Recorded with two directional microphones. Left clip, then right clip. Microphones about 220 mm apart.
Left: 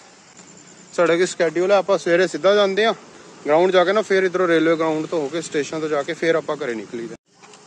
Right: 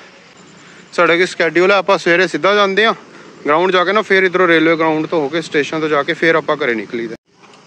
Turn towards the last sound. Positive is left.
turn(degrees=0)  # may be behind; listen again after turning